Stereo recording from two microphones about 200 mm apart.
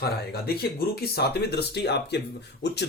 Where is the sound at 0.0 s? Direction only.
50° left (ahead or behind).